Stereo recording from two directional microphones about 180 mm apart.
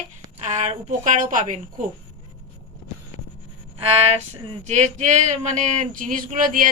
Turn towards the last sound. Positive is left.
turn(degrees=-50)  # may be behind; listen again after turning